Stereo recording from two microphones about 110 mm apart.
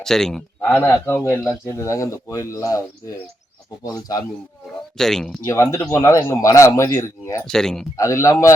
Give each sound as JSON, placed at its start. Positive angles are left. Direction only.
{"t": 0.0, "sound": "speech", "side_deg": 5}
{"t": 0.9, "sound": "speech", "side_deg": 25}
{"t": 3.8, "sound": "speech", "side_deg": 35}
{"t": 4.9, "sound": "speech", "side_deg": 5}
{"t": 5.5, "sound": "speech", "side_deg": 25}
{"t": 7.4, "sound": "speech", "side_deg": 5}
{"t": 7.9, "sound": "speech", "side_deg": 30}